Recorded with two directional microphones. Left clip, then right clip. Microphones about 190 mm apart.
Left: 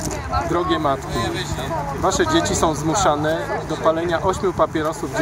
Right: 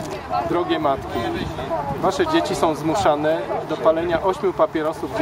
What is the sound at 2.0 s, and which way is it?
Speech, centre (ahead or behind).